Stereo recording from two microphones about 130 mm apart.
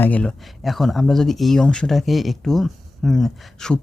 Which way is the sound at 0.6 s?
Centre (ahead or behind).